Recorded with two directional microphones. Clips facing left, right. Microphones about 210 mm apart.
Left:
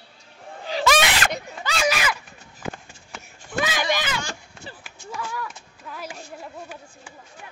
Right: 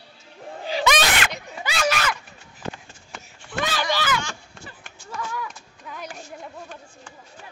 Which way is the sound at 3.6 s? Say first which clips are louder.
Right 1 dB; 15° left (ahead or behind).